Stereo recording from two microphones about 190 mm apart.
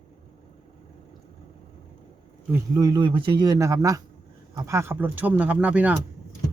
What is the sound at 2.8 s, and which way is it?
Speech, 20° right (ahead or behind).